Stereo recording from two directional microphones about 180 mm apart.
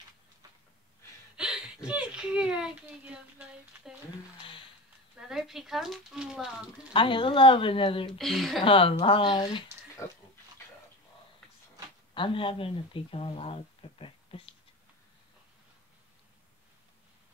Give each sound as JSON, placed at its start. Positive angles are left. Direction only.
{"t": 1.3, "sound": "speech", "side_deg": -5}
{"t": 5.3, "sound": "speech", "side_deg": 0}
{"t": 6.9, "sound": "speech", "side_deg": 30}
{"t": 8.1, "sound": "speech", "side_deg": 0}
{"t": 8.6, "sound": "speech", "side_deg": 30}
{"t": 12.1, "sound": "speech", "side_deg": 30}